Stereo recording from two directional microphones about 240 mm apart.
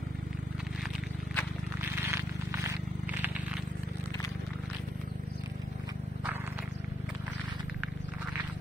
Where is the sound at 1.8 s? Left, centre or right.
Centre.